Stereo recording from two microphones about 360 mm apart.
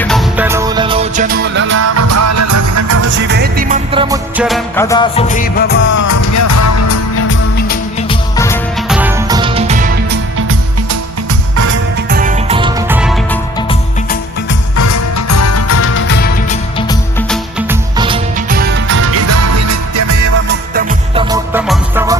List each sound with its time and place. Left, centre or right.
0.0 s music: centre; by 3.1 s right
3.2 s music: right
4.1 s music: centre; by 5.9 s left
6.0 s music: left
8.4 s music: centre
9.0 s music: centre
11.7 s music: right; by 13.4 s centre
14.8 s music: left
16.7 s music: centre
17.9 s music: centre; by 20.1 s right
21.2 s music: centre